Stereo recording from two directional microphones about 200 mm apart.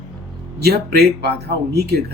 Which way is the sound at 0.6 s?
55° right (ahead or behind).